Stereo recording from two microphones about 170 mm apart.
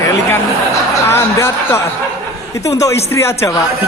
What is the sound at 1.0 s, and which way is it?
Speech, 15° left (ahead or behind).